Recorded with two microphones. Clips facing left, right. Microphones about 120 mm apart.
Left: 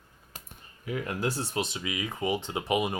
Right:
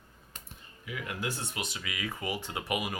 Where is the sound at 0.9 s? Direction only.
40° left (ahead or behind).